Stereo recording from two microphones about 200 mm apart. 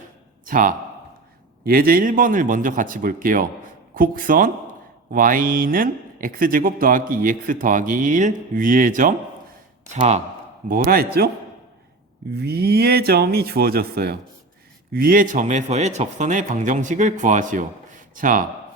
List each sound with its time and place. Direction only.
0.4 s a man's voice: 45° right (ahead or behind)
10.7 s speech: 45° right (ahead or behind)
12.3 s a man's voice: 55° right (ahead or behind)